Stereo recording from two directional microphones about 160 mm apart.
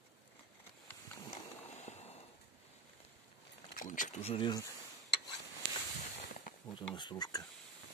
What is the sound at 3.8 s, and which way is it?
Speech, 55° left (ahead or behind).